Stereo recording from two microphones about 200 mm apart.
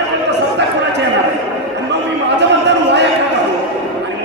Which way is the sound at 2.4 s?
60° right (ahead or behind).